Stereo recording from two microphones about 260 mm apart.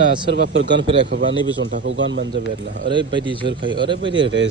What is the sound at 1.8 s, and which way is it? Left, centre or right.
Speech, right.